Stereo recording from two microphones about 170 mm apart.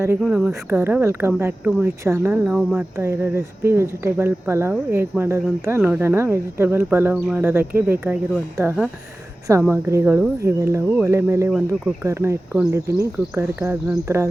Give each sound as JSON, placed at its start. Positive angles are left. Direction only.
{"t": 0.2, "sound": "speech", "side_deg": -5}
{"t": 2.9, "sound": "speech", "side_deg": -15}